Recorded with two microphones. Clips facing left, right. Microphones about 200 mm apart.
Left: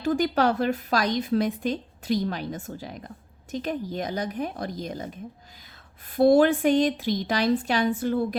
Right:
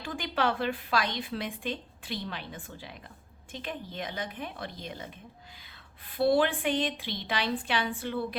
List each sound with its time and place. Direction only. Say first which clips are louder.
0.0 s a woman's voice: left 8 dB; 40° left (ahead or behind)